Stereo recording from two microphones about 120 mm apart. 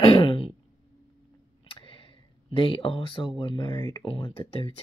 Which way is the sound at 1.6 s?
45° left (ahead or behind).